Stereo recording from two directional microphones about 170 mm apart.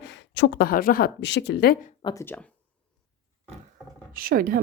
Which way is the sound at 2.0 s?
20° left (ahead or behind).